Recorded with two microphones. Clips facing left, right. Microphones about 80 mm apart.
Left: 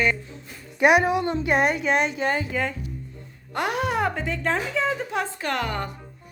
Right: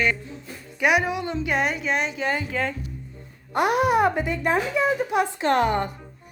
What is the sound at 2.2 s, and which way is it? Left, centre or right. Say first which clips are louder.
Speech: left 1 dB; left.